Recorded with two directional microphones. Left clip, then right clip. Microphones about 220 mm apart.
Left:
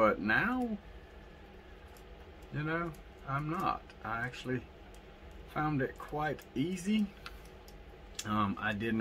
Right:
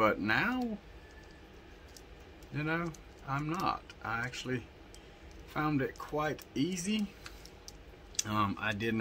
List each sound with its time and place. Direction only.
0.0 s speech: 25° right (ahead or behind)
2.5 s speech: 30° right (ahead or behind)
8.2 s speech: 20° right (ahead or behind)